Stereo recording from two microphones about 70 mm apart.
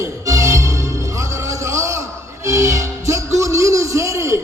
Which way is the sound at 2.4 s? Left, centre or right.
Right.